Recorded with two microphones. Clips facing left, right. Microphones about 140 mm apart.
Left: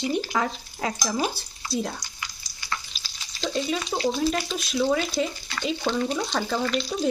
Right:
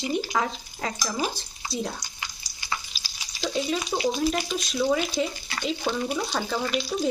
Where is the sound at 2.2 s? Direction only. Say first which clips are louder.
Even; 20° right (ahead or behind).